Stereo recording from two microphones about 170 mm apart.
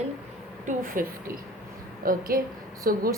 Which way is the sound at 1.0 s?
50° right (ahead or behind).